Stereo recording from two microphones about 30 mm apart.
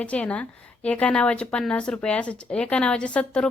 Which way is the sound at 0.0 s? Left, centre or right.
Left.